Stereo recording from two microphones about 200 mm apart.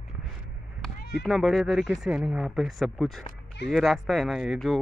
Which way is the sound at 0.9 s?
50° left (ahead or behind).